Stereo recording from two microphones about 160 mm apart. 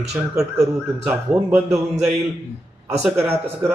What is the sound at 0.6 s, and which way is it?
A man's voice, 10° right (ahead or behind).